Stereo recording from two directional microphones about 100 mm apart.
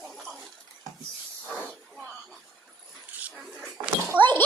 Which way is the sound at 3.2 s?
15° right (ahead or behind).